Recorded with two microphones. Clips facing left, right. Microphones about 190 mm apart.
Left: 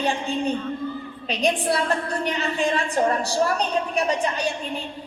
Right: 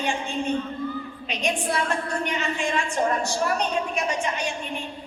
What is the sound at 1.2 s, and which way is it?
A woman's voice, 35° left (ahead or behind).